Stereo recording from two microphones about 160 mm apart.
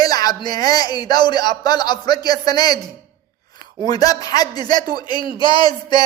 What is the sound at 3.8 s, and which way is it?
Speech, 20° left (ahead or behind).